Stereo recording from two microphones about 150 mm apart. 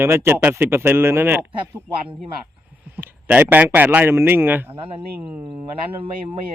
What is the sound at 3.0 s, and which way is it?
Speech, 15° right (ahead or behind).